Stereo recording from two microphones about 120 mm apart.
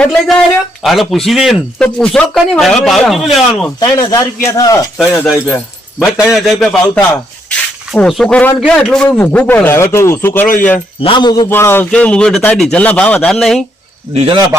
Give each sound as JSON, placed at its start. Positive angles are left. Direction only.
{"t": 0.0, "sound": "a man's voice", "side_deg": 10}
{"t": 3.8, "sound": "speech", "side_deg": 30}
{"t": 4.9, "sound": "speech", "side_deg": 0}
{"t": 8.0, "sound": "a man's voice", "side_deg": 5}
{"t": 9.0, "sound": "a man's voice", "side_deg": 15}
{"t": 11.0, "sound": "speech", "side_deg": 40}
{"t": 11.4, "sound": "speech", "side_deg": 20}
{"t": 11.9, "sound": "a man's voice", "side_deg": 10}
{"t": 14.1, "sound": "a man's voice", "side_deg": -50}